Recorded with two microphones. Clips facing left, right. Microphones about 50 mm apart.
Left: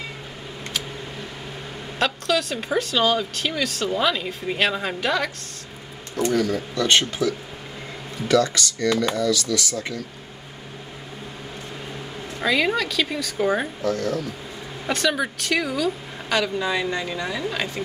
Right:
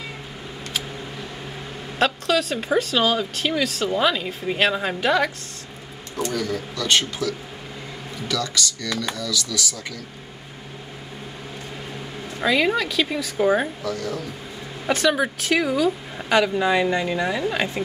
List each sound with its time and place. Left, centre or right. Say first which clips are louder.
2.0 s speech: right 2 dB; centre
6.7 s speech: even; left
8.3 s speech: left 6 dB; left
12.4 s speech: right 1 dB; centre
14.9 s speech: right 3 dB; centre